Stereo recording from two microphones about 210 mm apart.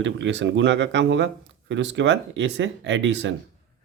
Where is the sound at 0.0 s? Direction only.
60° right (ahead or behind).